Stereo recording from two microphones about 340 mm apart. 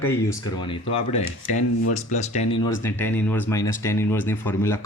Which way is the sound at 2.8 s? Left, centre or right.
Centre.